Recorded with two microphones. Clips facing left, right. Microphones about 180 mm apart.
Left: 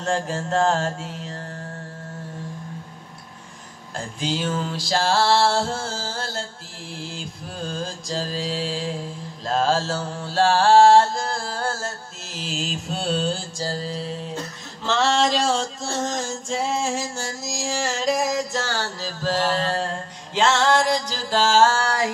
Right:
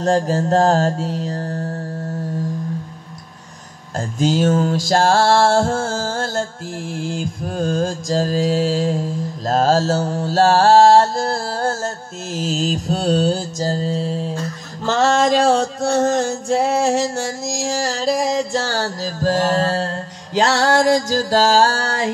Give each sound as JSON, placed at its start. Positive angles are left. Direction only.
{"t": 0.0, "sound": "mantra", "side_deg": -40}
{"t": 3.9, "sound": "music", "side_deg": -45}
{"t": 9.5, "sound": "mantra", "side_deg": -40}
{"t": 14.0, "sound": "music", "side_deg": -35}
{"t": 14.9, "sound": "a sound", "side_deg": -45}